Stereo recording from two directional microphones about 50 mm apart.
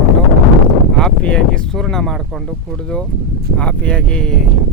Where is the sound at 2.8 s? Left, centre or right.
Left.